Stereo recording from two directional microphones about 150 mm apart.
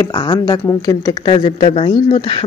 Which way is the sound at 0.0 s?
30° left (ahead or behind).